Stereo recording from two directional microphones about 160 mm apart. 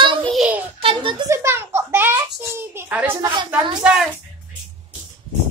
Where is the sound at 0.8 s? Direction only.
35° right (ahead or behind).